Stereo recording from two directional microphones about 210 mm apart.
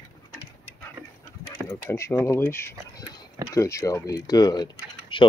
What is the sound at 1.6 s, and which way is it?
Speech, 10° left (ahead or behind).